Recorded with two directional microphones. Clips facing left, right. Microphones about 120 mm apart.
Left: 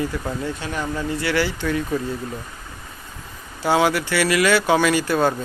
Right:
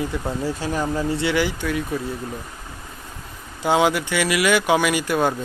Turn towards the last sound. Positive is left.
turn(degrees=-15)  # may be behind; listen again after turning